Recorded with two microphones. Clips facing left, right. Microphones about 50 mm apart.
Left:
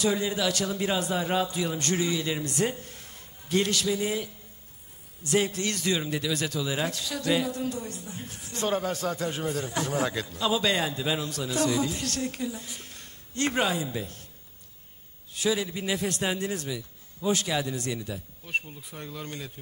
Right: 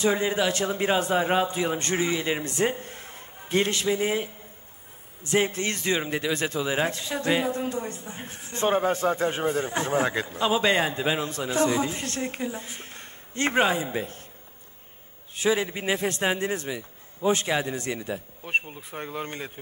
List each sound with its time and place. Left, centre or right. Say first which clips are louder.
0.0 s speech: right 3 dB; right
15.3 s speech: right 3 dB; right